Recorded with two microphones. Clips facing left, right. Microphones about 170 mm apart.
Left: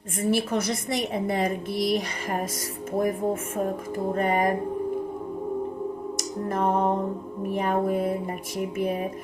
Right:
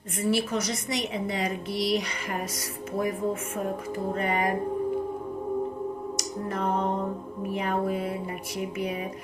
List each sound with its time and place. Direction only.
0.2 s a woman's voice: 50° left (ahead or behind)
3.9 s a woman's voice: 50° left (ahead or behind)
6.1 s music: 50° left (ahead or behind)
7.5 s a woman's voice: 45° left (ahead or behind)